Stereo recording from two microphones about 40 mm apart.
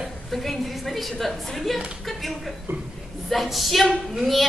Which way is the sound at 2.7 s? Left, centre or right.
Right.